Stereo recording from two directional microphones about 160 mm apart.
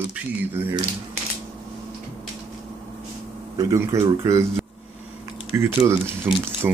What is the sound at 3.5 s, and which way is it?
Speech, 20° right (ahead or behind).